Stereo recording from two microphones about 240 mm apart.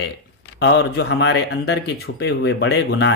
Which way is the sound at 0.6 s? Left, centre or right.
Left.